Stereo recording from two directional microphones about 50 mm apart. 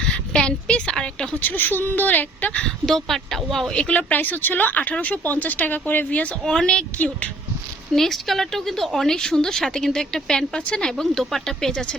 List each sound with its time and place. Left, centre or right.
0.0 s a woman's voice: centre
1.4 s speech: left
2.8 s a woman's voice: centre
3.7 s speech: left
6.4 s a woman's voice: centre
7.9 s a woman's voice: centre